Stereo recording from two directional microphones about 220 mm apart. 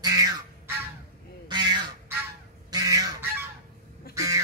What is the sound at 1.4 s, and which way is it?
Duck, 20° right (ahead or behind).